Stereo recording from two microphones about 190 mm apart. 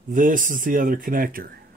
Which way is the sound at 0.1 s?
45° right (ahead or behind).